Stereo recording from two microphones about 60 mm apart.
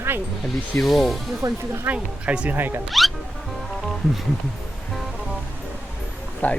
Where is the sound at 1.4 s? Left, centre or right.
Right.